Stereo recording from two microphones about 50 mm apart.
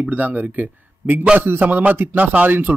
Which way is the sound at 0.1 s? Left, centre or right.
Right.